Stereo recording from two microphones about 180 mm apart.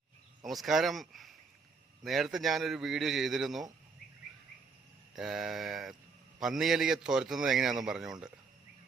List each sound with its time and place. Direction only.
0.4 s a man's voice: centre (ahead or behind)
5.1 s a man's voice: centre (ahead or behind)